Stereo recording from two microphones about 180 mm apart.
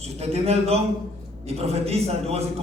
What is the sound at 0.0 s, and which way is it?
A man's voice, 35° right (ahead or behind).